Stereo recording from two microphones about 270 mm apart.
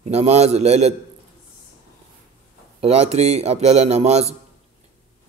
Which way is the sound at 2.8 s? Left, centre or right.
Right.